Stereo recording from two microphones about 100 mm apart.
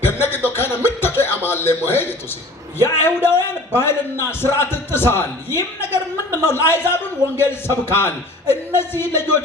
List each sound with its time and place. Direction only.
0.0 s a sound: 25° left (ahead or behind)
2.8 s a man's voice: 25° left (ahead or behind)
6.3 s a man's voice: 25° left (ahead or behind)